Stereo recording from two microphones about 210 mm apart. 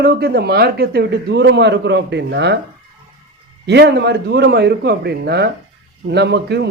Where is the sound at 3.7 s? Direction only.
55° right (ahead or behind).